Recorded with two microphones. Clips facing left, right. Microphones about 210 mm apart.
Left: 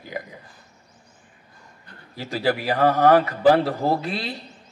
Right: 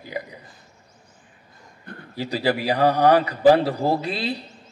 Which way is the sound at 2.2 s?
45° left (ahead or behind).